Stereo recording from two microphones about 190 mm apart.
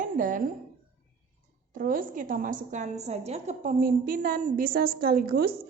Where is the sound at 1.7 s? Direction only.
45° right (ahead or behind).